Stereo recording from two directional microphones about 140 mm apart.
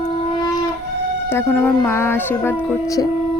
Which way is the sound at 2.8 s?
25° left (ahead or behind).